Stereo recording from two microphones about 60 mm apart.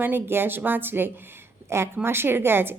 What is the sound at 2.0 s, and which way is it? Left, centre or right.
Speech, right.